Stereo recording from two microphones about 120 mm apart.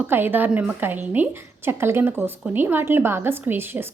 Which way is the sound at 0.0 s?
15° right (ahead or behind).